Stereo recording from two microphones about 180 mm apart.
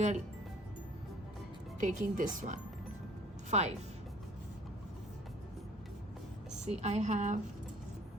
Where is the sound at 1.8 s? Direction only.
45° right (ahead or behind).